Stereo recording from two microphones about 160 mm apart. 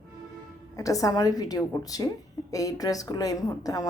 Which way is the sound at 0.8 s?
20° left (ahead or behind).